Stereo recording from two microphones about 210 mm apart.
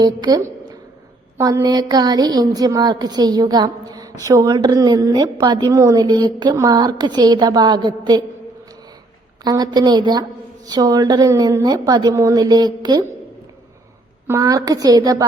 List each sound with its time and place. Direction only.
0.0 s a woman's voice: 20° right (ahead or behind)
9.4 s a woman's voice: 20° right (ahead or behind)
14.3 s a woman's voice: 15° right (ahead or behind)